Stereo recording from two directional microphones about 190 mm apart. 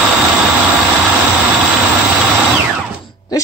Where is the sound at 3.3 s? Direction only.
20° left (ahead or behind).